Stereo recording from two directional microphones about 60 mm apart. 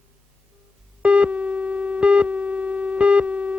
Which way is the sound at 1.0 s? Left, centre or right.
Centre.